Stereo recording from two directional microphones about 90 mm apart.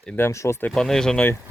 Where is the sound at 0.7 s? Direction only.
5° left (ahead or behind).